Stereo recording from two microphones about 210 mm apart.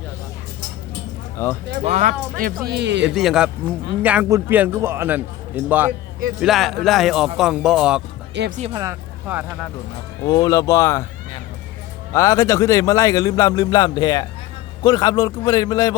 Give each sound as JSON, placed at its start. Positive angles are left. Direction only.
{"t": 1.4, "sound": "a man's voice", "side_deg": 10}
{"t": 1.8, "sound": "speech", "side_deg": -35}
{"t": 2.6, "sound": "speech", "side_deg": -55}
{"t": 3.1, "sound": "a man's voice", "side_deg": 0}
{"t": 8.4, "sound": "speech", "side_deg": -40}
{"t": 8.7, "sound": "speech", "side_deg": -15}
{"t": 10.2, "sound": "a man's voice", "side_deg": 20}
{"t": 12.1, "sound": "a man's voice", "side_deg": 15}